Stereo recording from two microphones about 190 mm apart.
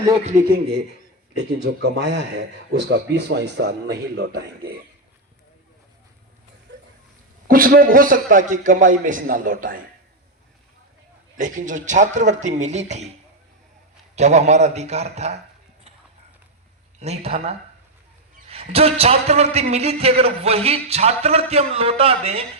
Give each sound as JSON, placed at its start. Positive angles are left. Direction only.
{"t": 0.3, "sound": "a man's voice", "side_deg": -45}
{"t": 1.4, "sound": "a man's voice", "side_deg": -65}
{"t": 6.7, "sound": "a sound", "side_deg": -70}
{"t": 7.4, "sound": "a man's voice", "side_deg": -50}
{"t": 11.3, "sound": "a man's voice", "side_deg": -40}
{"t": 14.2, "sound": "a man's voice", "side_deg": -35}
{"t": 17.0, "sound": "a man's voice", "side_deg": -35}